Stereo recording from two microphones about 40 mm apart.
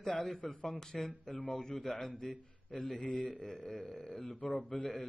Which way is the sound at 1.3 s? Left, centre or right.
Left.